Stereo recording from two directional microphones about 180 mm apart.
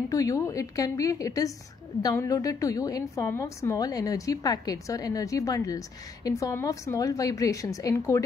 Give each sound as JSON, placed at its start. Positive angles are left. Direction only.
{"t": 0.1, "sound": "a woman's voice", "side_deg": 20}